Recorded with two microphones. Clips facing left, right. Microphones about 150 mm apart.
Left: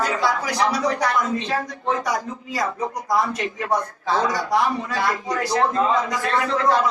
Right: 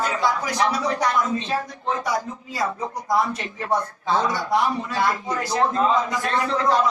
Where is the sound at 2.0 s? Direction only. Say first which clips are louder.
Even; 25° right (ahead or behind).